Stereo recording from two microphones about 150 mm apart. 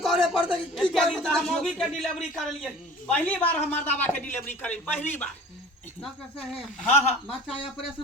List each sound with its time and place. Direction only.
0.0 s speech: centre (ahead or behind)
6.4 s speech: centre (ahead or behind)
6.9 s speech: 45° left (ahead or behind)